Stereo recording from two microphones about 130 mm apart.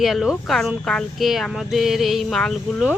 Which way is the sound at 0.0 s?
Centre (ahead or behind).